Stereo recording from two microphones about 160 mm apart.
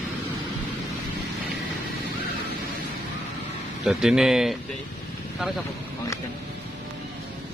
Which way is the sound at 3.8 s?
Centre (ahead or behind).